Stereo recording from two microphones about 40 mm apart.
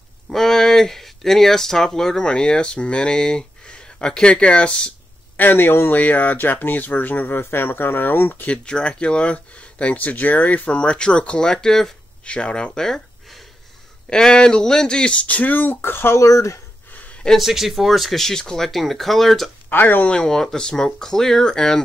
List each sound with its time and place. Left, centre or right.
0.3 s speech: centre; by 4.9 s left
5.4 s speech: left
5.9 s speech: left
8.6 s speech: left
9.9 s speech: left; by 11.9 s centre
12.3 s speech: left
12.7 s speech: centre
14.0 s speech: centre
15.2 s speech: left
17.4 s speech: centre
18.2 s speech: centre
19.7 s speech: left
20.1 s speech: centre